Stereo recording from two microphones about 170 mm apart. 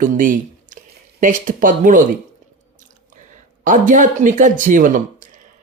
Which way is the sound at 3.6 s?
50° right (ahead or behind).